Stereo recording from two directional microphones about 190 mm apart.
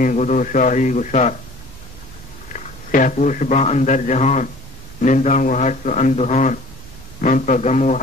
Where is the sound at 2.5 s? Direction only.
45° left (ahead or behind).